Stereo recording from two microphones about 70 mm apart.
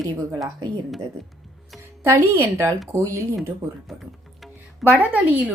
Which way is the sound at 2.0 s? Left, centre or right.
Right.